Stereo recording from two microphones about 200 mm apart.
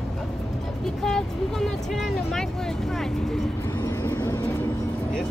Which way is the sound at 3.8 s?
15° left (ahead or behind).